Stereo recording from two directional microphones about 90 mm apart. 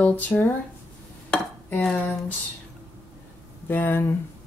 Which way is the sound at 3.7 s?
20° left (ahead or behind).